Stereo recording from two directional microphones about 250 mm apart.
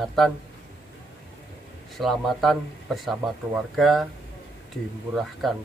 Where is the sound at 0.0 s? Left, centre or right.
Centre.